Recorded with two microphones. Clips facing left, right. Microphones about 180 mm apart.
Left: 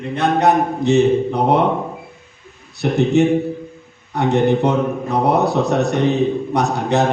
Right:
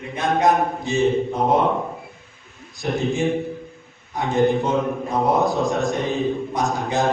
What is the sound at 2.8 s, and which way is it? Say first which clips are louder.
A man's voice: left 7 dB; 70° left (ahead or behind).